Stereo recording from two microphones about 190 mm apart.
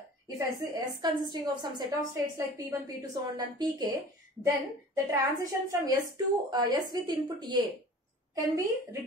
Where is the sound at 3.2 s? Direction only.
20° right (ahead or behind).